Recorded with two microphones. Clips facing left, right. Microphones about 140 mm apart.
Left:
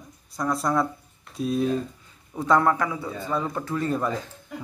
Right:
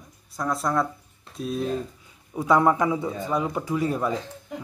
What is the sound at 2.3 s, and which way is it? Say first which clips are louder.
Speech: right 1 dB; 10° right (ahead or behind).